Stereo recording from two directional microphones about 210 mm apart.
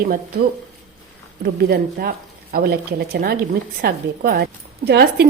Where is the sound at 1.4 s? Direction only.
45° right (ahead or behind).